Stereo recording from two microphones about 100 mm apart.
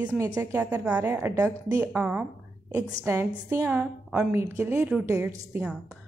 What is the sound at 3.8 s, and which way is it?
Speech, 10° right (ahead or behind).